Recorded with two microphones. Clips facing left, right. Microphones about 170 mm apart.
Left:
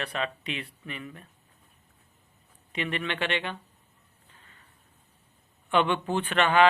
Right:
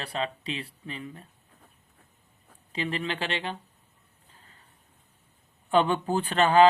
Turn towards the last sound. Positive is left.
turn(degrees=-35)  # may be behind; listen again after turning